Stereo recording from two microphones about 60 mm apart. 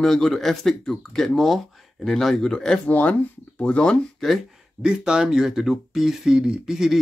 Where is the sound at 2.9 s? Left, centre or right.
Left.